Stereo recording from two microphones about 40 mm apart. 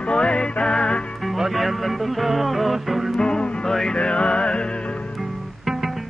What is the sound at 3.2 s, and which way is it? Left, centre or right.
Music, centre.